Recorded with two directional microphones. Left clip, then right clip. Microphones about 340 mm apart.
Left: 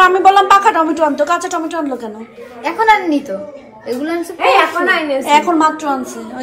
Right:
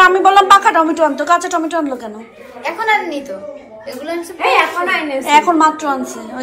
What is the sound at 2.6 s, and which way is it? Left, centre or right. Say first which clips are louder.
A woman's voice: left 4 dB; left.